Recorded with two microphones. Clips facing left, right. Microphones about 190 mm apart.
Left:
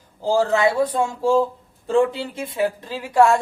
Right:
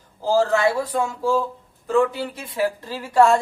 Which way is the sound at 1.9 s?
25° left (ahead or behind).